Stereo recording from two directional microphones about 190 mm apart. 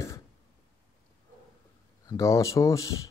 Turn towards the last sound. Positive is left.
turn(degrees=15)  # may be behind; listen again after turning